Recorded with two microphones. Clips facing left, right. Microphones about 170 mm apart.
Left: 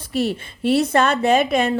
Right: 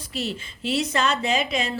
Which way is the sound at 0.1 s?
55° left (ahead or behind).